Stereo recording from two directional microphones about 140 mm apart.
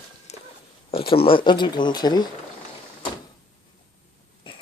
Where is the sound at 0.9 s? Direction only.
40° left (ahead or behind).